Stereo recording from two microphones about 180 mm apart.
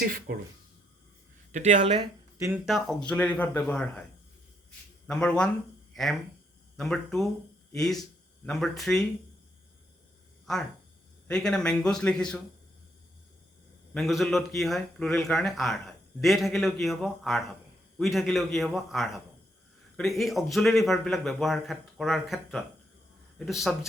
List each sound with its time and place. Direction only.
0.3 s speech: 55° right (ahead or behind)
1.5 s speech: 40° right (ahead or behind)
2.6 s speech: centre (ahead or behind)
5.0 s a man's voice: 5° left (ahead or behind)
10.4 s a man's voice: centre (ahead or behind)
13.9 s a man's voice: centre (ahead or behind)